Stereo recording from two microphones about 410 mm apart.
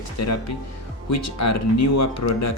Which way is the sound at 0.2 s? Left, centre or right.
Left.